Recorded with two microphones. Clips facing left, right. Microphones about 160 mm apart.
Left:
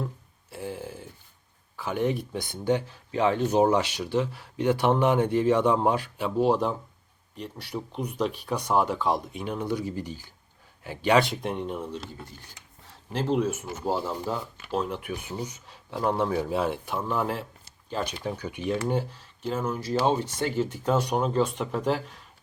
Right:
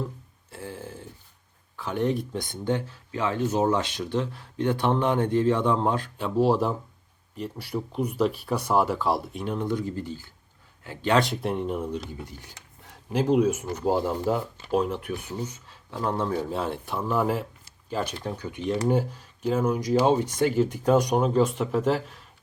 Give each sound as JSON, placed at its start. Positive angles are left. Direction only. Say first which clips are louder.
{"t": 0.5, "sound": "a sound", "louder": "left 2 dB", "side_deg": 15}
{"t": 1.7, "sound": "speech", "louder": "right 1 dB", "side_deg": 5}
{"t": 3.1, "sound": "speech", "louder": "left 3 dB", "side_deg": 20}
{"t": 6.3, "sound": "speech", "louder": "right 1 dB", "side_deg": 0}
{"t": 11.2, "sound": "speech", "louder": "right 1 dB", "side_deg": 0}
{"t": 15.4, "sound": "speech", "louder": "right 1 dB", "side_deg": 15}
{"t": 18.1, "sound": "speech", "louder": "even", "side_deg": 10}
{"t": 18.9, "sound": "speech", "louder": "right 4 dB", "side_deg": -10}